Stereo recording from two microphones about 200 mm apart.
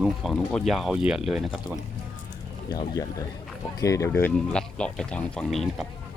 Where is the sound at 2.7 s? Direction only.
20° left (ahead or behind); by 5.8 s centre (ahead or behind).